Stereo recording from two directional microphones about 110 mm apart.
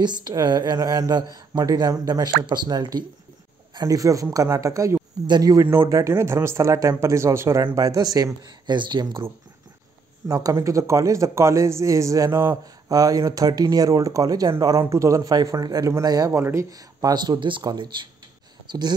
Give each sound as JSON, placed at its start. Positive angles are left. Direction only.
{"t": 0.0, "sound": "speech", "side_deg": -40}
{"t": 5.2, "sound": "speech", "side_deg": -40}
{"t": 10.2, "sound": "speech", "side_deg": -30}
{"t": 16.3, "sound": "speech", "side_deg": -20}
{"t": 16.7, "sound": "speech", "side_deg": -35}